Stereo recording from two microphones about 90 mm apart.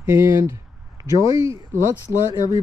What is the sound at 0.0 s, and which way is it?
Speech, 35° right (ahead or behind).